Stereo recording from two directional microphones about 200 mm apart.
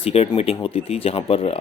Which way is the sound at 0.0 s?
30° left (ahead or behind).